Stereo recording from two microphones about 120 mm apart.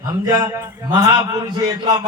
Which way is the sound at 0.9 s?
30° right (ahead or behind).